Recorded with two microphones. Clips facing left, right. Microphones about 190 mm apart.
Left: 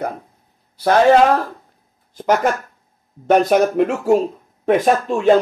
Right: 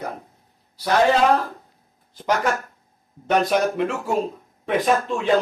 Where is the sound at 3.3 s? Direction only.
50° left (ahead or behind).